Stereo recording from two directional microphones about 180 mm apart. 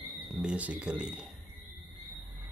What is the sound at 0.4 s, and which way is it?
Speech, 5° right (ahead or behind).